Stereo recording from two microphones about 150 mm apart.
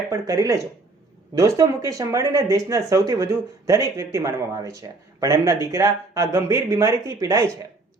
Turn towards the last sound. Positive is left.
turn(degrees=-20)  # may be behind; listen again after turning